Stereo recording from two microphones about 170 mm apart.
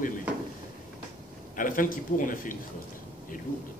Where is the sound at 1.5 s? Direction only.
50° left (ahead or behind).